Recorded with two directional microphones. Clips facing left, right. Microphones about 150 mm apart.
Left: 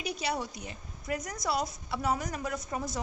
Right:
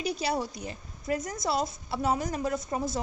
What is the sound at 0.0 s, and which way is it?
A woman's voice, 35° right (ahead or behind).